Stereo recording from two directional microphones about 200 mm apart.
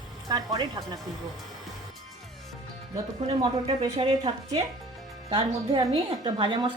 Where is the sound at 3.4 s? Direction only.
25° right (ahead or behind).